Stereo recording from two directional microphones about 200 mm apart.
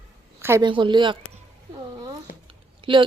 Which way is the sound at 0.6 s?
25° right (ahead or behind).